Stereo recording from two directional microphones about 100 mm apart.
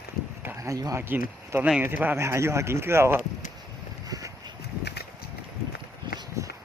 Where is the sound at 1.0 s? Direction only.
20° right (ahead or behind).